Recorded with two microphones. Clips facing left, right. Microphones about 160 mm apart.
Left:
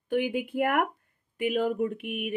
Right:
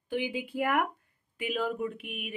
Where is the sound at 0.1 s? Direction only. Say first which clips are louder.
Left 5 dB; 55° left (ahead or behind).